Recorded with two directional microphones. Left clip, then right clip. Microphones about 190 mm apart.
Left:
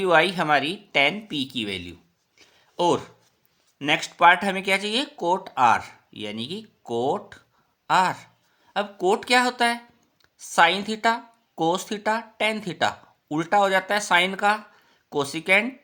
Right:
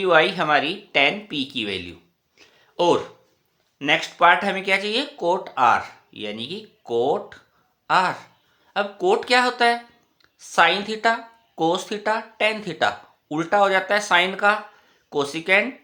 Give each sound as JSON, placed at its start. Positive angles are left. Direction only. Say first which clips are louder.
{"t": 0.0, "sound": "speech", "louder": "right 2 dB", "side_deg": 35}
{"t": 2.4, "sound": "a sound", "louder": "right 2 dB", "side_deg": 30}
{"t": 3.8, "sound": "speech", "louder": "right 2 dB", "side_deg": 35}